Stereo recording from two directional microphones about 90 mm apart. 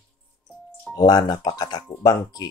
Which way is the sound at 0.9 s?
50° left (ahead or behind).